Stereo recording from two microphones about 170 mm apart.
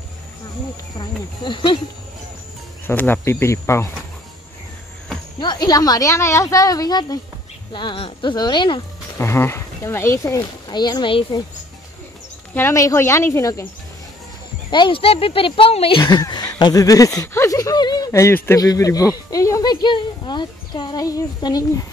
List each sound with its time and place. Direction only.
0.9 s speech: 25° left (ahead or behind)
2.9 s speech: 10° left (ahead or behind)
5.4 s speech: 25° left (ahead or behind)
9.2 s speech: 15° left (ahead or behind)
12.5 s speech: 15° left (ahead or behind)
14.7 s speech: 30° left (ahead or behind)